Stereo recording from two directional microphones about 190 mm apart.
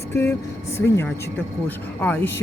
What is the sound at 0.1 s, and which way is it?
Speech, 15° left (ahead or behind).